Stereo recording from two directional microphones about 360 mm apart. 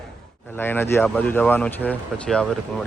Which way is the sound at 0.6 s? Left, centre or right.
Centre.